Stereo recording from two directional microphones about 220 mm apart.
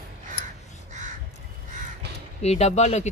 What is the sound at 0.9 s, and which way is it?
Crow, 35° right (ahead or behind).